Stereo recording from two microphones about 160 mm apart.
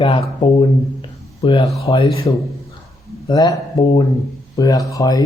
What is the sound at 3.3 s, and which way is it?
Speech, 25° left (ahead or behind).